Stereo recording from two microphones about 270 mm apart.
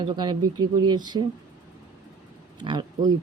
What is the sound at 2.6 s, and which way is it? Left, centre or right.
Speech, centre.